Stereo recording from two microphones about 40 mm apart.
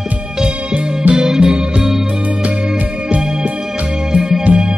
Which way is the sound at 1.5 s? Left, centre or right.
Right.